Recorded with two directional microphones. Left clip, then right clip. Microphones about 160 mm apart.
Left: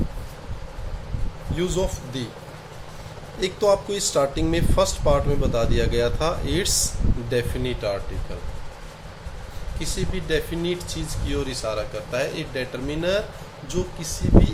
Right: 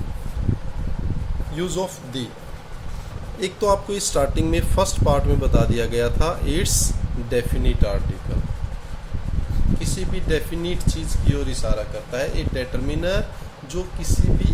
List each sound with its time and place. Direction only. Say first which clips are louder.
1.5 s speech: left 1 dB; 15° right (ahead or behind)
3.4 s speech: even; 15° right (ahead or behind)
9.8 s speech: left 4 dB; 15° right (ahead or behind)